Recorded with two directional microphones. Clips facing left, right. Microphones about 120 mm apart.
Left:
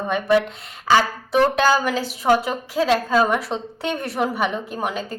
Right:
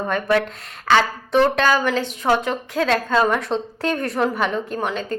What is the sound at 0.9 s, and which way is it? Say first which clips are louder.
A woman's voice: even; 10° left (ahead or behind).